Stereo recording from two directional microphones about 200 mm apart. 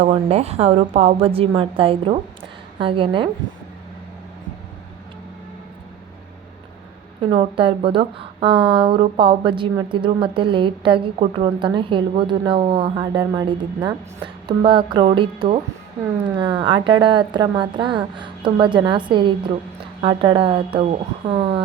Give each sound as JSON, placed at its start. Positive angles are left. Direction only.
{"t": 0.0, "sound": "a woman's voice", "side_deg": -30}
{"t": 7.2, "sound": "a woman's voice", "side_deg": -25}